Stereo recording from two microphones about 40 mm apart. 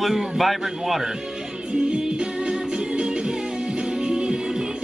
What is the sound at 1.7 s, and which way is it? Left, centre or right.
Music, right.